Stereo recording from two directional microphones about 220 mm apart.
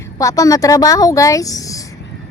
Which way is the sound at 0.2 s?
15° left (ahead or behind).